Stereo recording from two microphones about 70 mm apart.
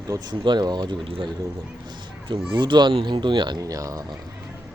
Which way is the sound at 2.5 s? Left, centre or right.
Right.